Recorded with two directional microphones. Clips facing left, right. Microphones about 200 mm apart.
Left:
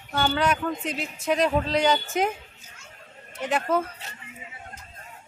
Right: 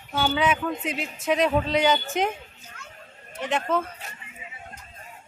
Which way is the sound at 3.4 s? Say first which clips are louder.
Left 1 dB; 5° left (ahead or behind).